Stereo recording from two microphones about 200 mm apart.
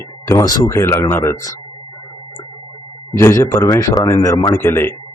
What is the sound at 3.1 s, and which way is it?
Speech, 15° left (ahead or behind).